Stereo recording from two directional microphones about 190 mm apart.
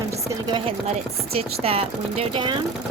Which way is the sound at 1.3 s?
30° right (ahead or behind).